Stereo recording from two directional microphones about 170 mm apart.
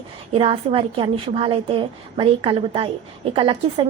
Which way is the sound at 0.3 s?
35° right (ahead or behind).